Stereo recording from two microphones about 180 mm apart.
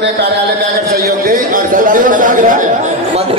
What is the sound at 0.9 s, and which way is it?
A man's voice, 50° right (ahead or behind).